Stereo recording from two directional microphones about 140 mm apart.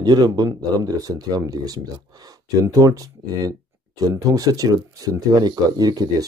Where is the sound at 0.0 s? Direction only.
30° right (ahead or behind).